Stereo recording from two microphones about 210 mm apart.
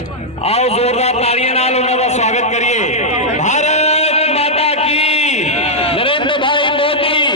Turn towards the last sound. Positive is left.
turn(degrees=25)  # may be behind; listen again after turning